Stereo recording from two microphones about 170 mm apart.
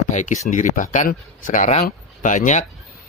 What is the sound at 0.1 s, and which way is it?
A man's voice, 45° left (ahead or behind).